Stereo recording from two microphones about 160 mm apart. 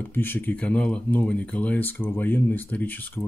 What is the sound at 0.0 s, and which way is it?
Speech, 15° left (ahead or behind).